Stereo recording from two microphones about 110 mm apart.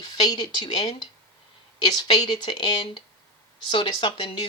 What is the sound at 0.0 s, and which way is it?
Speech, 40° left (ahead or behind).